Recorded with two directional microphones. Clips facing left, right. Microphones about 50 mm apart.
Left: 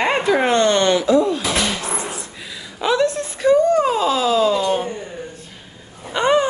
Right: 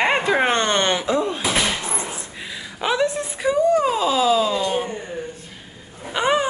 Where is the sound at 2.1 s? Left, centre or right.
Right; by 4.9 s centre.